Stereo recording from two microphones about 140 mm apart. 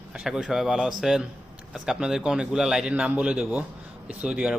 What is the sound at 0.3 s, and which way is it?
A man's voice, 5° right (ahead or behind).